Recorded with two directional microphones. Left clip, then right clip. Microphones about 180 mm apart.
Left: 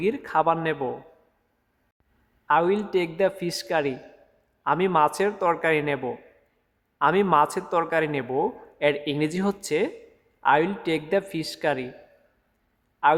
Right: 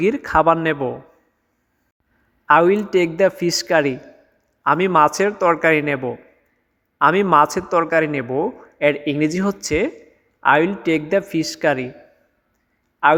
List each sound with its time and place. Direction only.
0.0 s speech: 25° right (ahead or behind)
2.5 s speech: 20° right (ahead or behind)
13.0 s speech: 20° right (ahead or behind)